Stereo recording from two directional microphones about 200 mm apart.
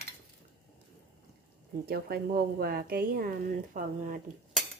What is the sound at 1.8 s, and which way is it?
A woman's voice, 50° right (ahead or behind).